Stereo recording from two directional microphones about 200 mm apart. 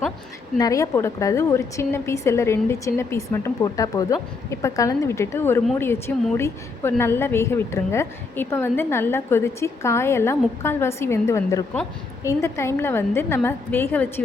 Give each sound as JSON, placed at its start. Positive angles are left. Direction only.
{"t": 0.6, "sound": "a woman's voice", "side_deg": 15}